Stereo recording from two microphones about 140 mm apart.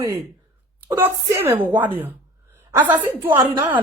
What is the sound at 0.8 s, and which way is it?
A woman's voice, 15° right (ahead or behind).